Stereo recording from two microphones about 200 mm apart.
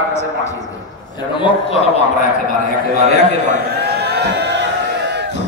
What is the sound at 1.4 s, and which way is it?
Speech, 25° left (ahead or behind).